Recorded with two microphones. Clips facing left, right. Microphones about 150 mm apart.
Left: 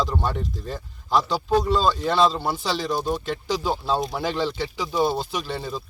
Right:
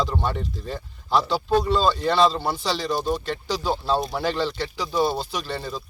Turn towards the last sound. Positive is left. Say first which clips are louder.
# left 1 dB
turn(degrees=10)  # may be behind; listen again after turning